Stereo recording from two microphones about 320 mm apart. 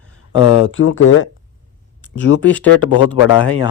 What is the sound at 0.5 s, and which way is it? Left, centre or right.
Speech, left.